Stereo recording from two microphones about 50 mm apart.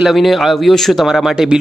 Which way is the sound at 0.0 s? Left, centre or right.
Centre.